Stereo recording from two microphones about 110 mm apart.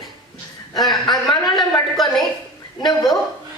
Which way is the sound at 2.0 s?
Centre (ahead or behind).